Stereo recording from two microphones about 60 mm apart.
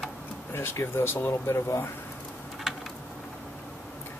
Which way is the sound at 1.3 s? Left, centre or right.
Left.